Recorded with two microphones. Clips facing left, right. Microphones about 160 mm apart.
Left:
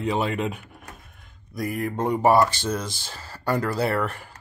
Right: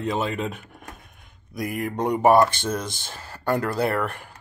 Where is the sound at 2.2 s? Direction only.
15° right (ahead or behind).